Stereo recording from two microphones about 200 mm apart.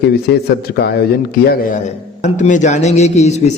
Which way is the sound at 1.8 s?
35° left (ahead or behind).